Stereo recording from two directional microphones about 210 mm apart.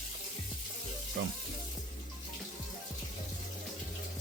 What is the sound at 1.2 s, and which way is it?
Speech, 60° right (ahead or behind).